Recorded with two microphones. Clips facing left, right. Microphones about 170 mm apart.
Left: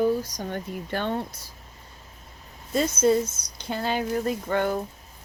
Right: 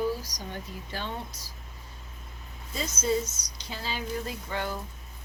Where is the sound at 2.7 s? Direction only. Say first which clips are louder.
Left 8 dB; 60° left (ahead or behind).